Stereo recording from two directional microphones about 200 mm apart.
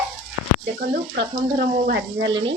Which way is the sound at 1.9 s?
55° right (ahead or behind).